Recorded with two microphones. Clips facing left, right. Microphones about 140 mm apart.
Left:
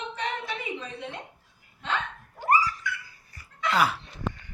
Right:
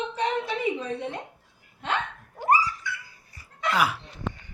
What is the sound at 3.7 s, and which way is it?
Speech, 10° right (ahead or behind).